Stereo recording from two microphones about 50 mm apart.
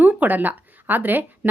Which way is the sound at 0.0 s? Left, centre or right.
Right.